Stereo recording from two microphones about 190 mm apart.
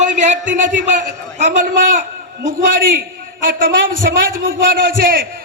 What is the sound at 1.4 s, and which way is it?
Speech, 45° right (ahead or behind).